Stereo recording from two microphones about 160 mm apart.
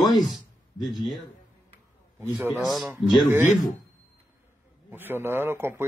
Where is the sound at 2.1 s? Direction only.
15° right (ahead or behind).